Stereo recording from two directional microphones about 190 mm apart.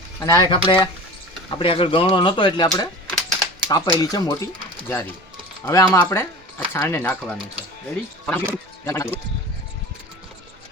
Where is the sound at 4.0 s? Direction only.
20° left (ahead or behind).